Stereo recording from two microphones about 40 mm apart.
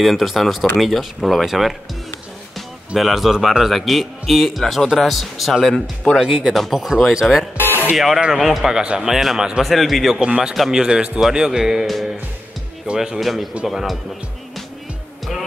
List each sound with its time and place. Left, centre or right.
0.0 s speech: centre
3.0 s speech: centre
6.2 s speech: right
6.5 s a man's voice: centre
7.5 s music: left
7.9 s a man's voice: centre
10.2 s a man's voice: centre
11.8 s speech: centre
12.9 s a man's voice: centre
13.2 s speech: centre